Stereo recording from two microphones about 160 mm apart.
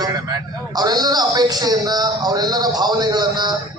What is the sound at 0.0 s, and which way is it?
A man's voice, 25° right (ahead or behind).